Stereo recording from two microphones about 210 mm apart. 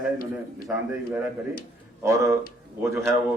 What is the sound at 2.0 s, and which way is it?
Speech, 15° right (ahead or behind).